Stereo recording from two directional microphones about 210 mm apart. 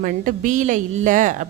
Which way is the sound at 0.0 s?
40° right (ahead or behind).